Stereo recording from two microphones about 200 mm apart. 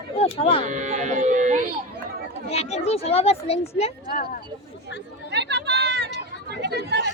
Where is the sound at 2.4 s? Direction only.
30° left (ahead or behind).